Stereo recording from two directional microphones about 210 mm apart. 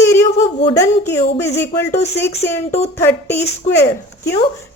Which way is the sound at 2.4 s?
10° left (ahead or behind).